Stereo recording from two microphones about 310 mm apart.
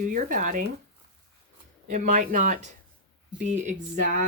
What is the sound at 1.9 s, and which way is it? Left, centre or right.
Speech, right.